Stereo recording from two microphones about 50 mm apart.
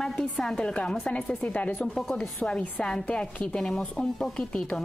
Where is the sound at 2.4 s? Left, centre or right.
Centre.